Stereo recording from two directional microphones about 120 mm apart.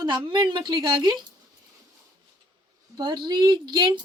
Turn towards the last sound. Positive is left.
turn(degrees=-35)  # may be behind; listen again after turning